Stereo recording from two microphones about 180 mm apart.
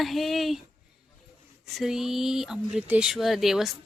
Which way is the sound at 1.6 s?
Centre (ahead or behind).